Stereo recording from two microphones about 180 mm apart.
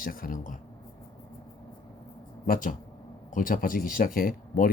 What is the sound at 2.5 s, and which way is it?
Speech, 45° left (ahead or behind).